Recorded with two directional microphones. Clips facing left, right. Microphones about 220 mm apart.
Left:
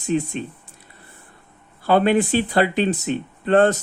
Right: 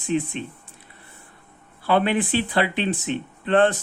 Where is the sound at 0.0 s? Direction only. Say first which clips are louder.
Left 2 dB; 40° left (ahead or behind).